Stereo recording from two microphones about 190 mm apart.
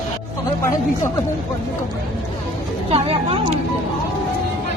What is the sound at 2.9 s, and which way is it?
Speech, 30° right (ahead or behind).